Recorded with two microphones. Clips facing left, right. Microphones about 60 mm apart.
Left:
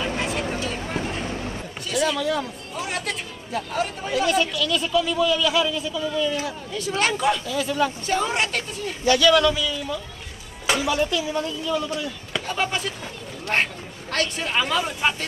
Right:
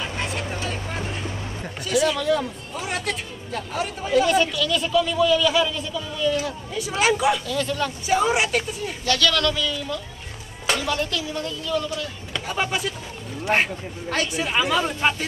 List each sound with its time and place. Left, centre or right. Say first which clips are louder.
0.0 s vehicle: left 3 dB; centre
1.9 s speech: right 2 dB; centre
7.4 s speech: left 2 dB; centre
8.1 s a woman's voice: right 3 dB; centre
9.0 s speech: left 5 dB; centre
12.4 s speech: right 1 dB; centre
14.1 s speech: even; centre